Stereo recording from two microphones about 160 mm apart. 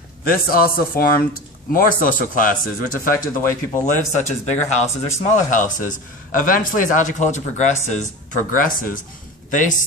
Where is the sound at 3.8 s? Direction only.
50° left (ahead or behind).